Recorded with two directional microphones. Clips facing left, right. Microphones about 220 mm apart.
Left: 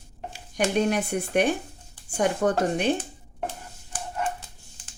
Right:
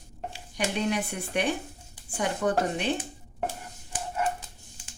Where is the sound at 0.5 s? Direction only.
45° left (ahead or behind).